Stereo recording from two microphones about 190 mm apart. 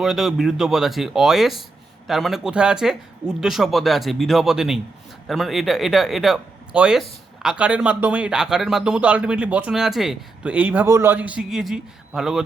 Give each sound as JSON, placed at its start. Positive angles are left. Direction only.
{"t": 0.0, "sound": "speech", "side_deg": 0}